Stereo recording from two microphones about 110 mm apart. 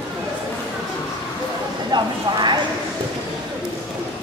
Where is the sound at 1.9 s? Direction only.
40° right (ahead or behind).